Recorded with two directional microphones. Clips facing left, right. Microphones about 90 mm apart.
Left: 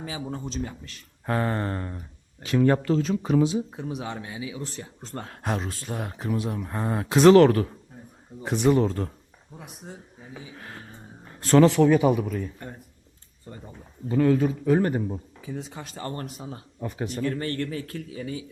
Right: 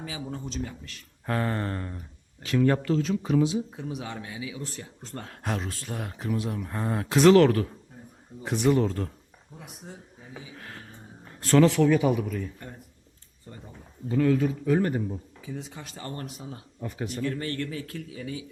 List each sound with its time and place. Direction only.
0.0 s speech: 30° left (ahead or behind)
7.3 s speech: 35° left (ahead or behind)
10.6 s a sound: 20° left (ahead or behind)
11.3 s speech: 25° left (ahead or behind)
13.5 s a sound: 55° left (ahead or behind)
14.1 s speech: 35° left (ahead or behind)